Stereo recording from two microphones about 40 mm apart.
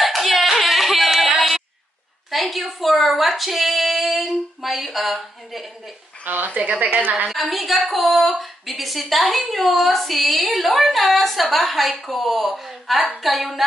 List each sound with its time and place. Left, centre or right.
0.0 s singing: centre
2.3 s a woman's voice: centre
6.2 s a woman's voice: right
7.3 s a woman's voice: centre